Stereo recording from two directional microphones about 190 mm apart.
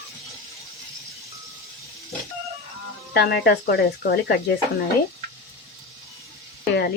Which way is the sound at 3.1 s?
60° left (ahead or behind).